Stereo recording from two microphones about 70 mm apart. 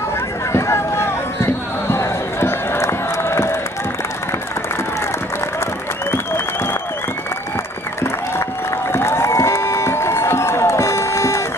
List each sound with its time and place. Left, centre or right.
0.5 s run: left
6.1 s applause: left
8.9 s crowd: left